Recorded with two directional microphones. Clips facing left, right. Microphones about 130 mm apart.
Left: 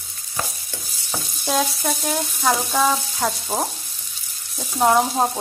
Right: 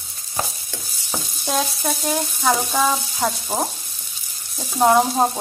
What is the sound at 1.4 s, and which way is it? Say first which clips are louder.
Sizzle: left 1 dB; centre (ahead or behind).